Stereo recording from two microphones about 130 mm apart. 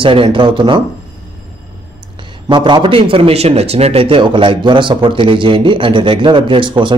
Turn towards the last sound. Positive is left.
turn(degrees=-40)  # may be behind; listen again after turning